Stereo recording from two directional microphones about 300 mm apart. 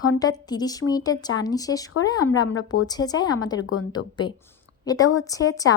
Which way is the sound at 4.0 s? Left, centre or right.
Left.